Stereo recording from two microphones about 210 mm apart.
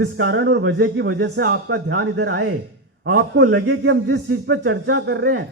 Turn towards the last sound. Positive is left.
turn(degrees=-50)  # may be behind; listen again after turning